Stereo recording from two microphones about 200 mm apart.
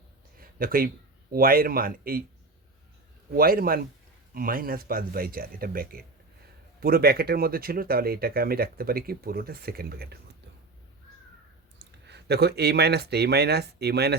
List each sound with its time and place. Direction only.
0.3 s a sound: 45° right (ahead or behind)
1.3 s speech: 45° right (ahead or behind)
3.3 s speech: 45° right (ahead or behind)
12.0 s speech: 55° right (ahead or behind)